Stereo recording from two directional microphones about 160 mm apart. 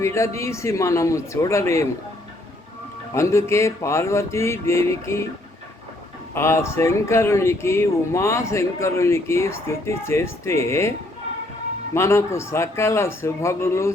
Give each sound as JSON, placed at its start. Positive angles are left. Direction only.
{"t": 0.0, "sound": "speech", "side_deg": 20}
{"t": 3.2, "sound": "speech", "side_deg": 15}
{"t": 6.3, "sound": "speech", "side_deg": 15}
{"t": 11.9, "sound": "speech", "side_deg": 15}